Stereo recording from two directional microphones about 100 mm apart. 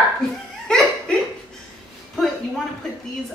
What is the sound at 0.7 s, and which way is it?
Laughter, 5° left (ahead or behind).